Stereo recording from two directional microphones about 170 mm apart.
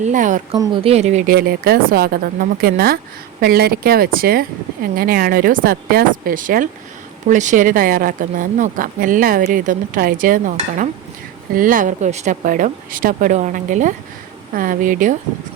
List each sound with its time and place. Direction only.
0.0 s speech: 45° right (ahead or behind)
0.8 s speech: 35° right (ahead or behind)
1.3 s a woman's voice: 60° right (ahead or behind)